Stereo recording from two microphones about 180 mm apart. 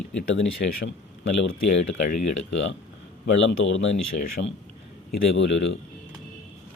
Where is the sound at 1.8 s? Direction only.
40° left (ahead or behind).